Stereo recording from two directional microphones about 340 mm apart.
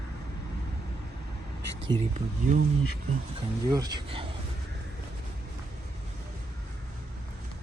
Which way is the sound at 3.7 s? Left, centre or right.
Centre.